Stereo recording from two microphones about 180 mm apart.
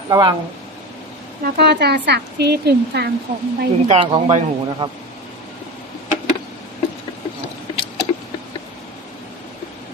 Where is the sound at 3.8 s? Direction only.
35° right (ahead or behind).